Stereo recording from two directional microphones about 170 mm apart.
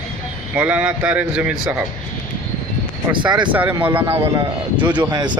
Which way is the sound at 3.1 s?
25° right (ahead or behind).